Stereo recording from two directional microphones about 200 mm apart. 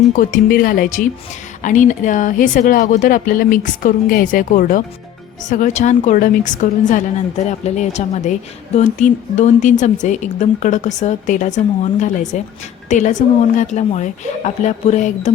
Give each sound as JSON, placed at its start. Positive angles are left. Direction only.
{"t": 0.2, "sound": "a woman's voice", "side_deg": 45}